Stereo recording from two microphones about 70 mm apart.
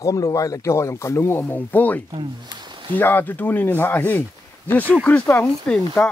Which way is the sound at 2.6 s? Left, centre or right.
Right.